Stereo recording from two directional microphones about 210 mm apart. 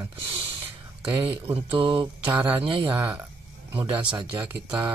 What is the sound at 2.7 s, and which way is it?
Mantra, 25° right (ahead or behind).